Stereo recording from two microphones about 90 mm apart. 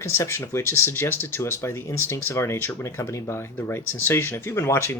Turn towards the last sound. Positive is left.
turn(degrees=30)  # may be behind; listen again after turning